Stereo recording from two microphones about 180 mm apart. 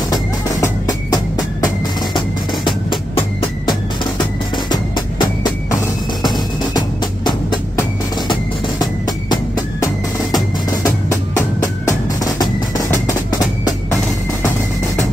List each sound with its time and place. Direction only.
2.9 s music: 25° left (ahead or behind)